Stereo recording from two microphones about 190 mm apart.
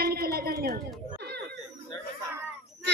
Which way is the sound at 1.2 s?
60° right (ahead or behind).